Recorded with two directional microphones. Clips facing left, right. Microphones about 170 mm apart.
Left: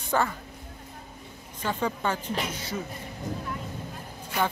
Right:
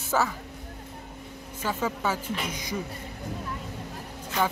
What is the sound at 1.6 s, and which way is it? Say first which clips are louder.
Speech: even; 5° right (ahead or behind).